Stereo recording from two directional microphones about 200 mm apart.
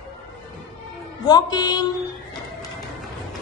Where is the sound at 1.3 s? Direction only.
20° left (ahead or behind).